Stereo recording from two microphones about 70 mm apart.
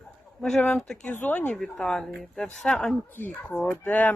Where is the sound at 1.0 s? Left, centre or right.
Left.